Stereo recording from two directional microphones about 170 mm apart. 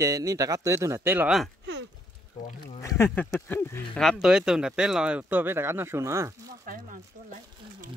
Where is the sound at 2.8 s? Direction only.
15° left (ahead or behind).